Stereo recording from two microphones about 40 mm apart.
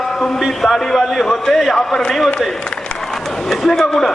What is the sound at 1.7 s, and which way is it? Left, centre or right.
Speech, centre.